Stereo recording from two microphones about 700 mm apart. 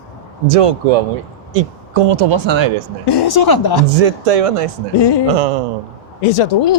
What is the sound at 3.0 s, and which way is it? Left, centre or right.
Speech, left.